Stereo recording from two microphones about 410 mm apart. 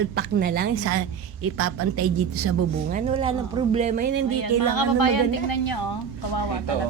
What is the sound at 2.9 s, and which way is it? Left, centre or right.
Speech, centre.